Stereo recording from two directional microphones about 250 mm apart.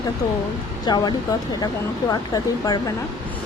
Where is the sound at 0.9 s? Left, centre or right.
Centre.